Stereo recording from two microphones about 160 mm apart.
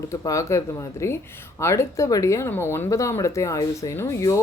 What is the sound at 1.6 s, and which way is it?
Speech, 15° left (ahead or behind).